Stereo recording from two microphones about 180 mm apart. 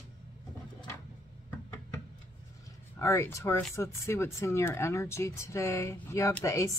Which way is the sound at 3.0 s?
15° left (ahead or behind).